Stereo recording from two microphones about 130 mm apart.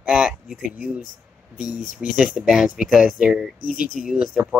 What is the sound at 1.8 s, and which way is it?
Speech, 90° left.